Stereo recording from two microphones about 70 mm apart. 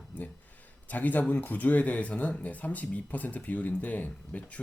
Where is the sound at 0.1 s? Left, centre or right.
Left.